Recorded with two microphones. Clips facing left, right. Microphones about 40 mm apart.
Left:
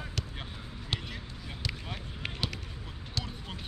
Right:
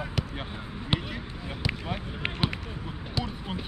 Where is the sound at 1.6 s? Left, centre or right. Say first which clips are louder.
Right 7 dB; right.